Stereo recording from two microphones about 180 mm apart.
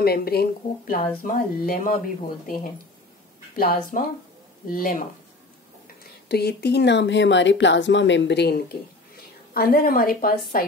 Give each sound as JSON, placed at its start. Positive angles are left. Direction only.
{"t": 0.0, "sound": "speech", "side_deg": 60}
{"t": 3.5, "sound": "speech", "side_deg": 50}
{"t": 6.2, "sound": "speech", "side_deg": 65}
{"t": 9.1, "sound": "a woman's voice", "side_deg": 55}